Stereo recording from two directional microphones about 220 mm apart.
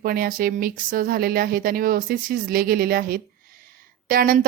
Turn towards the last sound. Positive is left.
turn(degrees=-40)  # may be behind; listen again after turning